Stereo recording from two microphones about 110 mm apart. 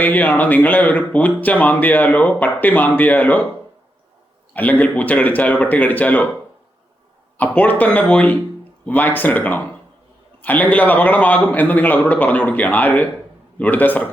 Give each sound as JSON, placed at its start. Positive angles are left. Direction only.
{"t": 0.0, "sound": "speech", "side_deg": 15}
{"t": 4.5, "sound": "speech", "side_deg": 15}
{"t": 7.3, "sound": "speech", "side_deg": 15}